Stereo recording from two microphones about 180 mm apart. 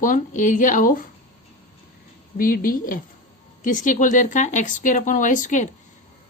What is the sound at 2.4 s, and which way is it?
Speech, 50° left (ahead or behind).